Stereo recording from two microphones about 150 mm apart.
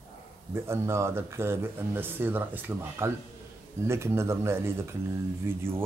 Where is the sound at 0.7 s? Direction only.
15° right (ahead or behind).